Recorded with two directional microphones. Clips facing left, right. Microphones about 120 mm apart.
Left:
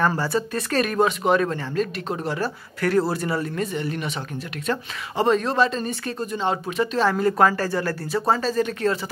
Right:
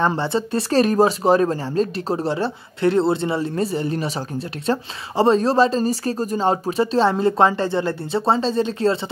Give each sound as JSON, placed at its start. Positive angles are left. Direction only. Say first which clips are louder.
{"t": 0.0, "sound": "speech", "louder": "right 2 dB", "side_deg": -25}